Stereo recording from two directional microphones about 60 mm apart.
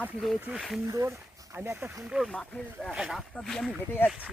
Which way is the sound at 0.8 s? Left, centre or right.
Right.